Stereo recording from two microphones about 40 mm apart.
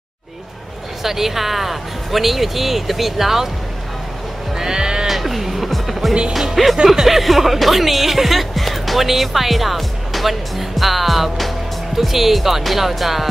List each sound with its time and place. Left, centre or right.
1.0 s speech: centre
4.6 s speech: centre
5.0 s music: centre
6.5 s speech: centre